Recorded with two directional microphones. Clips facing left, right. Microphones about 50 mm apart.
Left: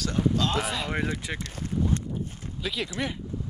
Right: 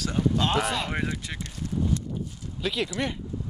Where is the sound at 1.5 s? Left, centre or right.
Left.